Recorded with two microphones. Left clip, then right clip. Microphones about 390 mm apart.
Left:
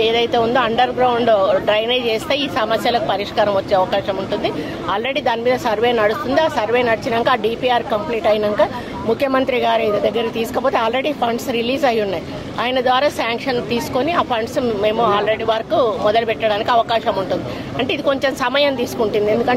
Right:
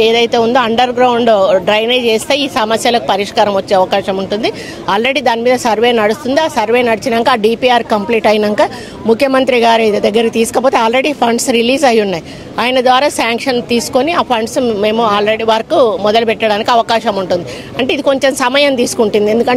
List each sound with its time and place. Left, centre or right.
0.0 s speech: right